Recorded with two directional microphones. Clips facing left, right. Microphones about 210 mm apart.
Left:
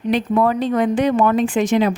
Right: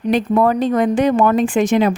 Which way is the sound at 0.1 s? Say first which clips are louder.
Right 2 dB; 45° right (ahead or behind).